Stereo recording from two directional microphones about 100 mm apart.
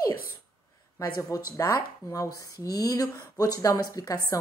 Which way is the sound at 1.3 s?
35° left (ahead or behind).